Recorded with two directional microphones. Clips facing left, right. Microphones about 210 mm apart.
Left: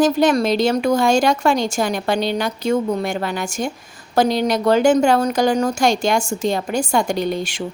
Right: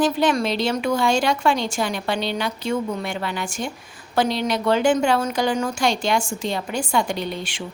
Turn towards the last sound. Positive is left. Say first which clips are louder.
# left 6 dB
turn(degrees=40)  # may be behind; listen again after turning